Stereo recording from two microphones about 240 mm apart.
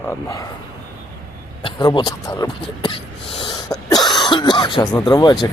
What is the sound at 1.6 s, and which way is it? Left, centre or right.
Speech, centre.